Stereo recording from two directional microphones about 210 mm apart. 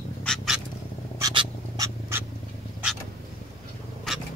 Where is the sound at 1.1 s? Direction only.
15° right (ahead or behind).